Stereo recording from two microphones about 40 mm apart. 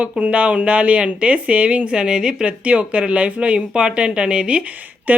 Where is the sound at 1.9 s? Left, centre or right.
Right.